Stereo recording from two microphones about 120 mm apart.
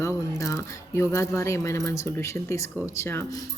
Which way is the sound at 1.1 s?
25° left (ahead or behind).